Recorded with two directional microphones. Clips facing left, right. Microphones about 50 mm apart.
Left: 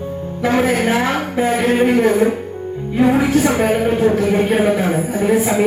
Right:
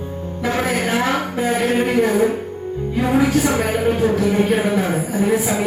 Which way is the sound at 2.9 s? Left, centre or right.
Left.